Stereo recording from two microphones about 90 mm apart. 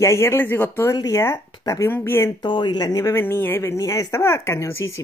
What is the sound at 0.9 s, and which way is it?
Speech, 45° left (ahead or behind).